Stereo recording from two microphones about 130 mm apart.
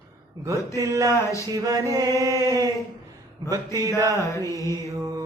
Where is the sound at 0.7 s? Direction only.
25° right (ahead or behind).